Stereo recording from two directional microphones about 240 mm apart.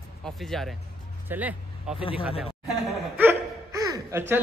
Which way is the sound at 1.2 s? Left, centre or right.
Centre.